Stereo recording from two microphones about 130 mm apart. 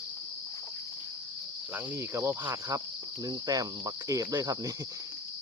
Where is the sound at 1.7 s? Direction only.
20° right (ahead or behind).